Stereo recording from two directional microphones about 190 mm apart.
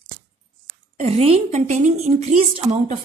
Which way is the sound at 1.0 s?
30° right (ahead or behind).